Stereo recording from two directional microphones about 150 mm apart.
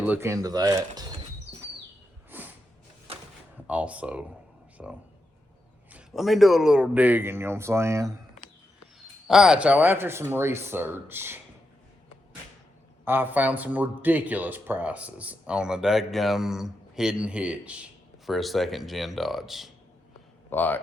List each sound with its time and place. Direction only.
0.0 s speech: 15° right (ahead or behind)
2.3 s a sound: 15° right (ahead or behind)
3.7 s speech: 10° right (ahead or behind)
9.0 s speech: 5° right (ahead or behind)
13.1 s speech: 15° right (ahead or behind)
20.5 s speech: 10° left (ahead or behind)